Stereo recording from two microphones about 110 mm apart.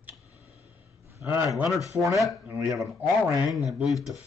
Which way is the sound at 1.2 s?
20° right (ahead or behind).